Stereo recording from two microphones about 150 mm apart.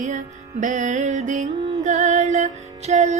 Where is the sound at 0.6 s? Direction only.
55° right (ahead or behind).